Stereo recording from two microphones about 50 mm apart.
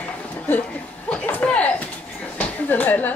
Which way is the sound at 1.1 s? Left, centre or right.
Left.